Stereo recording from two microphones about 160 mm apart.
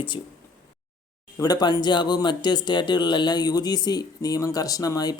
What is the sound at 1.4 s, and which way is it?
Speech, 25° left (ahead or behind).